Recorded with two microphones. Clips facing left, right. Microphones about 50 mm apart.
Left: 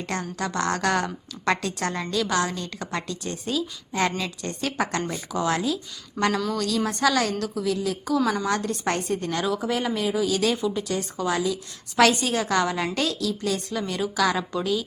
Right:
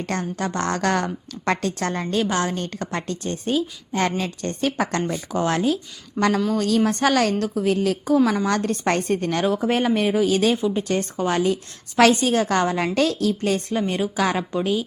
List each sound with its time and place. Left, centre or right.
0.0 s a woman's voice: right
8.0 s a woman's voice: right
8.4 s a woman's voice: right
10.8 s a woman's voice: right
13.7 s a woman's voice: right